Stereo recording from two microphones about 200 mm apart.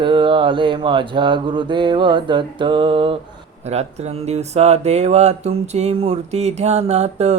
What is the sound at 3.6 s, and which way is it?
Speech, 35° right (ahead or behind).